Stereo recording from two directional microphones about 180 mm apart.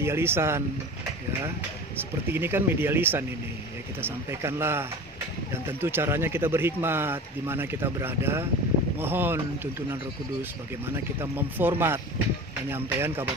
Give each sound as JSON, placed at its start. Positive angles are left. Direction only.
{"t": 0.0, "sound": "speech", "side_deg": -15}
{"t": 2.0, "sound": "speech", "side_deg": -10}
{"t": 11.1, "sound": "speech", "side_deg": -10}